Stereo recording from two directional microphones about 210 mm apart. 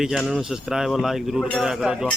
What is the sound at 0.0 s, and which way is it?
Speech, centre (ahead or behind).